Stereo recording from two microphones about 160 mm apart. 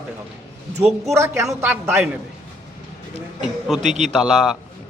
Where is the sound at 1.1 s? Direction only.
15° right (ahead or behind).